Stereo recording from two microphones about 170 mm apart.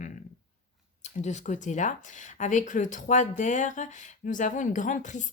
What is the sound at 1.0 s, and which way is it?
Speech, 45° left (ahead or behind).